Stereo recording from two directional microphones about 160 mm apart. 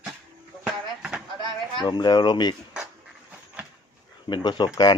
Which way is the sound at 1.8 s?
25° left (ahead or behind).